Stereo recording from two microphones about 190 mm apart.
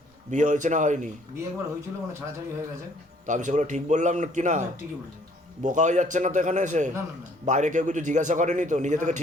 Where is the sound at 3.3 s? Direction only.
40° right (ahead or behind).